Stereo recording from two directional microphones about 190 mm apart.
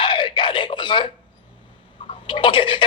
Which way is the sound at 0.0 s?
25° left (ahead or behind).